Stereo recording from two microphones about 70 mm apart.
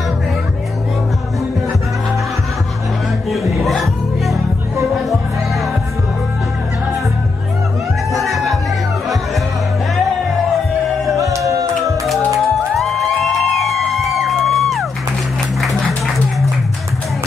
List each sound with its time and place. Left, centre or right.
3.3 s music: centre
8.1 s music: centre
11.1 s music: right
12.4 s music: centre